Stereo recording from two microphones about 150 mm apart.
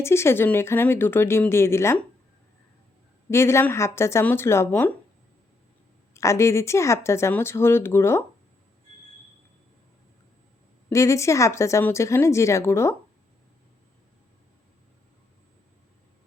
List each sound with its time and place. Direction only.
0.0 s speech: 15° left (ahead or behind)
3.2 s speech: 15° left (ahead or behind)
6.1 s speech: 20° left (ahead or behind)
10.8 s speech: 20° left (ahead or behind)